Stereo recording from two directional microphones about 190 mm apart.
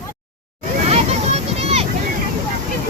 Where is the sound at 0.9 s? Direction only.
35° right (ahead or behind).